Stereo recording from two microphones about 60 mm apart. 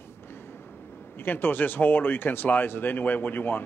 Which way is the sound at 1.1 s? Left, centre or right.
Left.